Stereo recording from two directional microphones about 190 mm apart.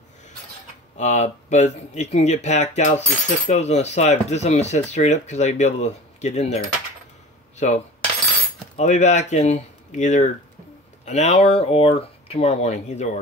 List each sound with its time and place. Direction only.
0.9 s speech: 40° left (ahead or behind)
7.5 s cutlery: 40° left (ahead or behind)
8.7 s speech: 35° left (ahead or behind)